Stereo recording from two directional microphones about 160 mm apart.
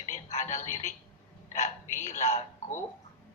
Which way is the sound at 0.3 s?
45° left (ahead or behind).